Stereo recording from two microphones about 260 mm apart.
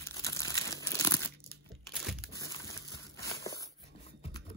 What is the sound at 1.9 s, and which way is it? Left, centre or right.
Crumpling, centre.